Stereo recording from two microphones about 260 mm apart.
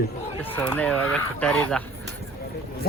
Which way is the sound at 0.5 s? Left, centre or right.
Centre.